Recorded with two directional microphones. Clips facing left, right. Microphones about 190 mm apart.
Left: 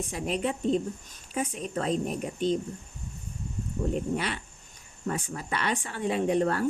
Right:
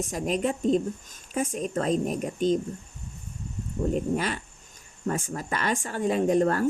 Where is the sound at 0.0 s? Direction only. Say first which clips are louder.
Right 3 dB; 45° right (ahead or behind).